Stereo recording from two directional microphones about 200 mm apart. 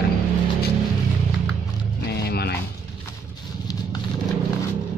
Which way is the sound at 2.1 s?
55° left (ahead or behind).